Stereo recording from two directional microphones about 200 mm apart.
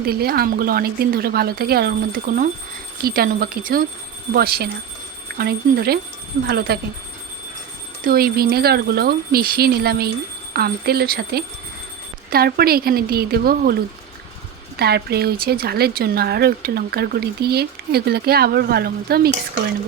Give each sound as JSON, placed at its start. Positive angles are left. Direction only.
{"t": 0.0, "sound": "speech", "side_deg": -50}
{"t": 8.0, "sound": "speech", "side_deg": -50}